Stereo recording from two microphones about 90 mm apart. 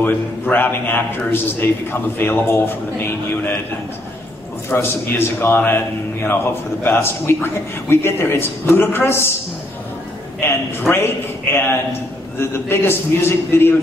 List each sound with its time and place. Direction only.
0.0 s a man's voice: 20° left (ahead or behind)
4.6 s a man's voice: 25° left (ahead or behind)
10.4 s a man's voice: 25° left (ahead or behind)